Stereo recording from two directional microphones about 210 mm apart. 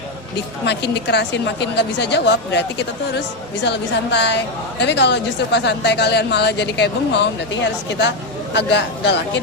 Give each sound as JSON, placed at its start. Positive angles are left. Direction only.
{"t": 0.6, "sound": "a woman's voice", "side_deg": 55}